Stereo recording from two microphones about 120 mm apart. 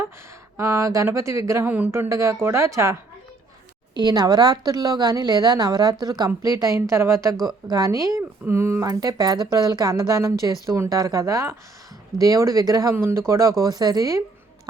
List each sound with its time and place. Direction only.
0.5 s a woman's voice: 25° right (ahead or behind)